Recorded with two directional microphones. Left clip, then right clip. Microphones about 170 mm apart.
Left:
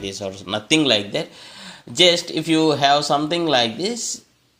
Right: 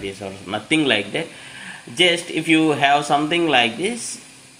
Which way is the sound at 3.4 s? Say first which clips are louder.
Right 2 dB; 30° left (ahead or behind).